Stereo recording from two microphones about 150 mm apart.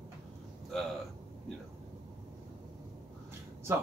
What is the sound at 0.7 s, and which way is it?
Speech, centre (ahead or behind).